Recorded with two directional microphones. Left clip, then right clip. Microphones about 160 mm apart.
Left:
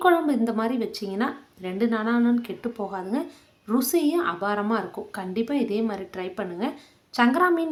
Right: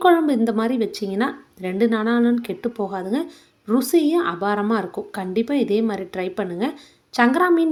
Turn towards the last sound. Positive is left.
turn(degrees=-20)  # may be behind; listen again after turning